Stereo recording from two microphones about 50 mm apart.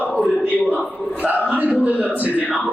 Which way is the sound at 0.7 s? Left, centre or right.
Right.